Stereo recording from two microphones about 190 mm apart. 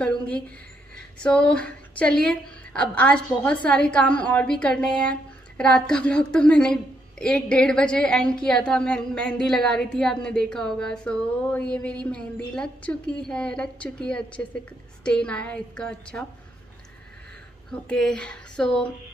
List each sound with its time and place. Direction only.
1.2 s a woman's voice: 5° left (ahead or behind)
17.6 s a woman's voice: 5° left (ahead or behind)